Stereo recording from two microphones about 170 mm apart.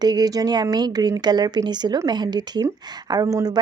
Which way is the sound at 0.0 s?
25° right (ahead or behind).